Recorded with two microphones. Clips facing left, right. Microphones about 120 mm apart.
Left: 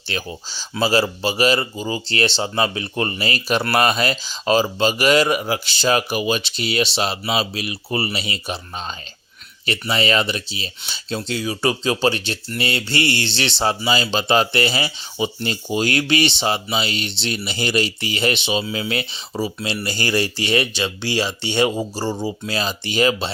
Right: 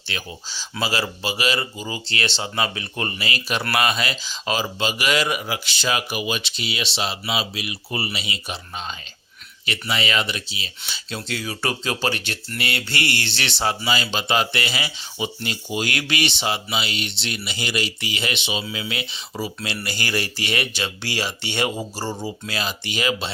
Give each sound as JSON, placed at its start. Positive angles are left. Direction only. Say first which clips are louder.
{"t": 0.1, "sound": "speech", "louder": "left 5 dB", "side_deg": 35}
{"t": 9.6, "sound": "speech", "louder": "left 5 dB", "side_deg": 35}
{"t": 19.4, "sound": "speech", "louder": "left 5 dB", "side_deg": 25}
{"t": 22.5, "sound": "speech", "louder": "left 7 dB", "side_deg": 35}